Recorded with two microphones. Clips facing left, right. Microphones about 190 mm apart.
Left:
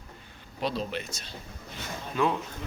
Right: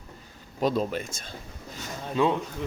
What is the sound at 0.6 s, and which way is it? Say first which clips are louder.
Speech: right 5 dB; 45° right (ahead or behind).